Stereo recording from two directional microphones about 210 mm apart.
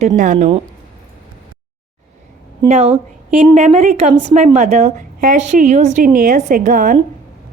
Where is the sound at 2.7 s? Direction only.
30° right (ahead or behind).